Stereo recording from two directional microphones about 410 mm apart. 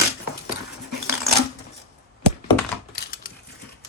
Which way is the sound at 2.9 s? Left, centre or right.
Left.